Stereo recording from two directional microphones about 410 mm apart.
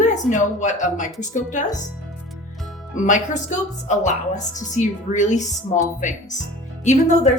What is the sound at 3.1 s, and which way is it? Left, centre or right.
A woman's voice, centre.